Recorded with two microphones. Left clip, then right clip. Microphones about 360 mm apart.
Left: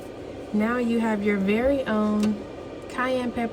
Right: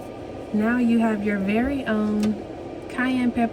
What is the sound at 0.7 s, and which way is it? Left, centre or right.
Speech, centre.